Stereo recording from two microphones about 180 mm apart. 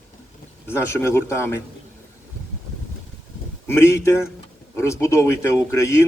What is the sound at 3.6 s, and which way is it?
A man's voice, 15° left (ahead or behind).